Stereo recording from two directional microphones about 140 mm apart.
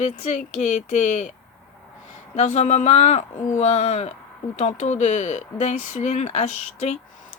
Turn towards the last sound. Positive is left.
turn(degrees=55)  # may be behind; listen again after turning